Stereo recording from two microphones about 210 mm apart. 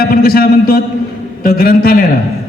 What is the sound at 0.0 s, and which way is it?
A man's voice, 45° left (ahead or behind).